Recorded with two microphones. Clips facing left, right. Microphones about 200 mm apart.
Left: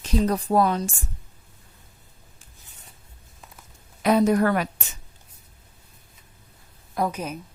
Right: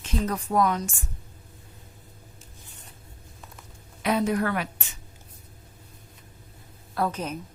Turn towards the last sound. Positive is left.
turn(degrees=10)  # may be behind; listen again after turning